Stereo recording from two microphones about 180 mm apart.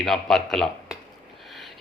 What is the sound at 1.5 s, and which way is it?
Sniff, centre (ahead or behind).